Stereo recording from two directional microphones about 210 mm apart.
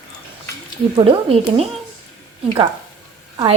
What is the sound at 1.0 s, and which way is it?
Speech, 25° right (ahead or behind).